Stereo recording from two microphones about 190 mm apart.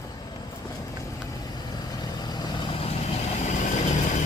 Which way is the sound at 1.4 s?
20° left (ahead or behind).